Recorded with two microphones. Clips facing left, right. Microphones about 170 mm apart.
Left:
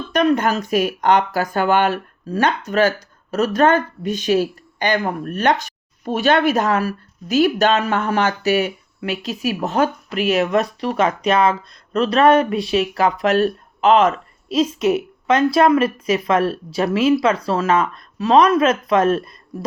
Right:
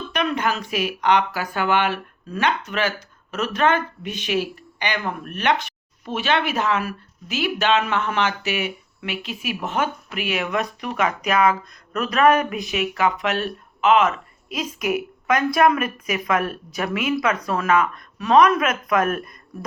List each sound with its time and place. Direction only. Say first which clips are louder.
0.1 s speech: left 7 dB; 45° left (ahead or behind)